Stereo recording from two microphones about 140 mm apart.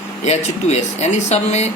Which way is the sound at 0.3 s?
55° left (ahead or behind).